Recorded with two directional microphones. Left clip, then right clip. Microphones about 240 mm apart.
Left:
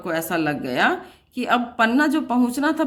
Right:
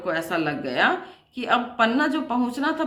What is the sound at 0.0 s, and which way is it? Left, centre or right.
A woman's voice, left.